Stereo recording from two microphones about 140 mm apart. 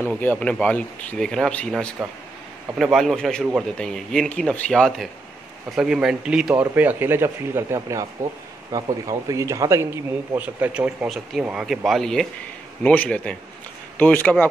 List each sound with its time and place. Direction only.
0.0 s speech: 15° left (ahead or behind)
5.8 s a man's voice: 5° right (ahead or behind); by 14.5 s 10° left (ahead or behind)